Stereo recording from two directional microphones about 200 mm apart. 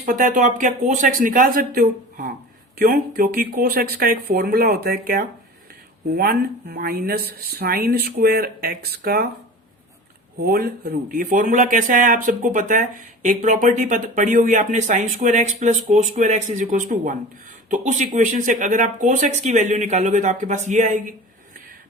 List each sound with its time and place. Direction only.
0.0 s speech: 40° right (ahead or behind)
10.4 s speech: 50° right (ahead or behind)